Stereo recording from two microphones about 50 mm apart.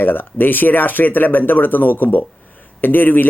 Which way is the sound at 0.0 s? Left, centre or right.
Left.